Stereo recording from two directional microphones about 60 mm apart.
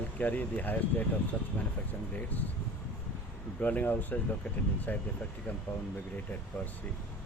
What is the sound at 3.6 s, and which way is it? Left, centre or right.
Speech, left.